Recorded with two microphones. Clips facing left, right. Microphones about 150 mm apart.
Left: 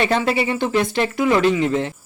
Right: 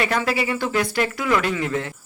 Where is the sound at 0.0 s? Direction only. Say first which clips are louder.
Left 3 dB; 25° left (ahead or behind).